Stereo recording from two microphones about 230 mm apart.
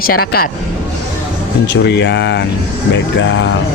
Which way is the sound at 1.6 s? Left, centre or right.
Left.